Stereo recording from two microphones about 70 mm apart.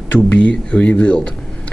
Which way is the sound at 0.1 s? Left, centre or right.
Centre.